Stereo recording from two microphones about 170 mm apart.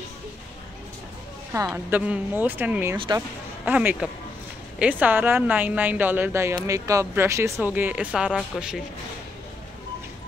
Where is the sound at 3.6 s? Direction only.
10° right (ahead or behind).